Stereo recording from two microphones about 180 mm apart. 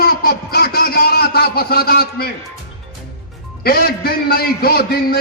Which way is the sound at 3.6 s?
55° left (ahead or behind).